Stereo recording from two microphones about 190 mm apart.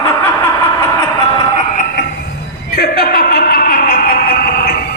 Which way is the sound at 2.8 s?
55° left (ahead or behind).